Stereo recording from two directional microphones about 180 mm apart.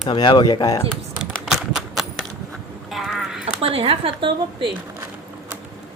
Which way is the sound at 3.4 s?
30° right (ahead or behind).